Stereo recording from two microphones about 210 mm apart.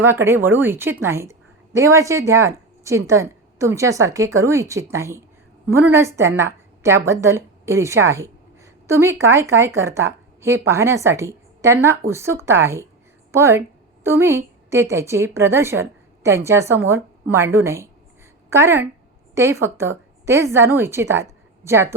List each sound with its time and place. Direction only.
0.0 s a woman's voice: 10° right (ahead or behind)